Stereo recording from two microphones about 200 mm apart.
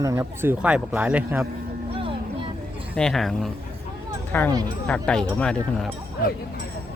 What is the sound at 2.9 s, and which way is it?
Speech, 5° left (ahead or behind).